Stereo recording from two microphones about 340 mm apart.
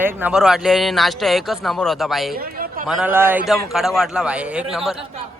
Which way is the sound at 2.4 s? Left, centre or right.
Right.